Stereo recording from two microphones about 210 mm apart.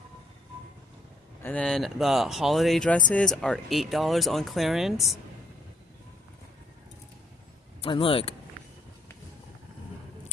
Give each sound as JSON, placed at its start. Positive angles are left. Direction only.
{"t": 1.4, "sound": "speech", "side_deg": 5}
{"t": 7.8, "sound": "speech", "side_deg": 25}